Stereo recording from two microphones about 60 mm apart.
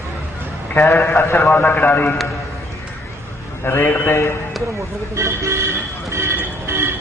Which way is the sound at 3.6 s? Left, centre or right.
Left.